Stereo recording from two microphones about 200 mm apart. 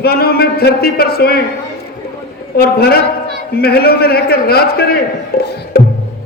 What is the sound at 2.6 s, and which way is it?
A man's voice, 50° left (ahead or behind).